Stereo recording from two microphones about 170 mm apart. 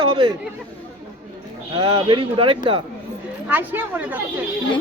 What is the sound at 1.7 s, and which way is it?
Speech, 25° right (ahead or behind).